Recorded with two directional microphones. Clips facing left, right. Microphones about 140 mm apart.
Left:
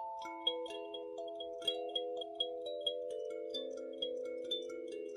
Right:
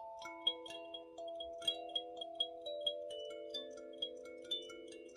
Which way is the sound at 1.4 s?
45° left (ahead or behind).